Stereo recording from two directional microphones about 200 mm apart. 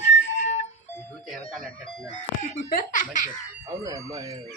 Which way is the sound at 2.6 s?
45° left (ahead or behind).